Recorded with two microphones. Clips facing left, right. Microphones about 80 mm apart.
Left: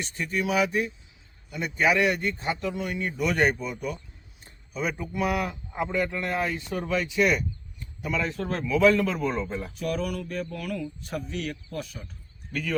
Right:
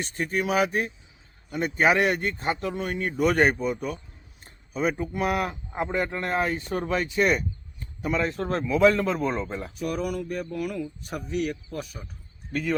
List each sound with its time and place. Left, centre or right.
0.0 s a man's voice: right
9.7 s speech: centre